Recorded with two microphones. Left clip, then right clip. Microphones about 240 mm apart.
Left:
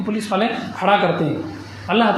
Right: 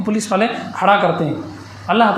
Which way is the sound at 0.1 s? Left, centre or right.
Right.